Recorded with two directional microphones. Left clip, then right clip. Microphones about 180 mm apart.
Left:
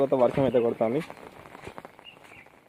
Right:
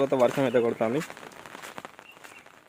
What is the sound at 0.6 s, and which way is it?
Speech, 25° right (ahead or behind).